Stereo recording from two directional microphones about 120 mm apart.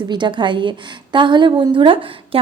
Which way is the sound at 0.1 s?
40° right (ahead or behind).